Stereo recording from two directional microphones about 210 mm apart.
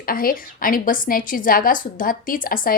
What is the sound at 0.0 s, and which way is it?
A woman's voice, 45° left (ahead or behind).